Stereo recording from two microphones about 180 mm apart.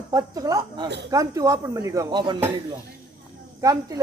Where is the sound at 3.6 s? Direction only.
15° right (ahead or behind).